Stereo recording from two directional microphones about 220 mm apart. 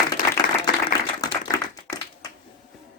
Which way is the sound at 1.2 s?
15° left (ahead or behind).